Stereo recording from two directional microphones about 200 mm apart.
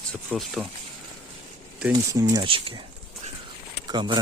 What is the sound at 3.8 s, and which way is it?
Speech, 20° right (ahead or behind).